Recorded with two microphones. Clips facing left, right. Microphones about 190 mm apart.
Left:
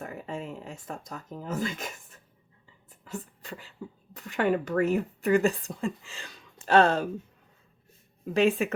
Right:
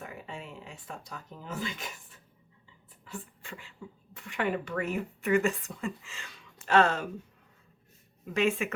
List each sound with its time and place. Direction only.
0.0 s a sound: 45° left (ahead or behind)
3.0 s speech: 40° left (ahead or behind)
8.2 s speech: 35° left (ahead or behind)